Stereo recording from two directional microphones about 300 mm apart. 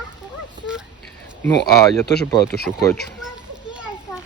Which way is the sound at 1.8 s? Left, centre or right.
Centre.